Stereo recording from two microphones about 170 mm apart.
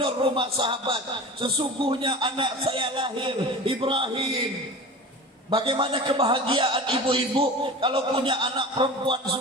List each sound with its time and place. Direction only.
0.0 s a man's voice: 30° right (ahead or behind)
5.5 s a man's voice: 30° right (ahead or behind)